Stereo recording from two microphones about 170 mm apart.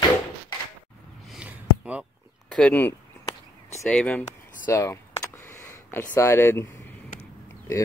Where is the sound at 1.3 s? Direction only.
5° right (ahead or behind).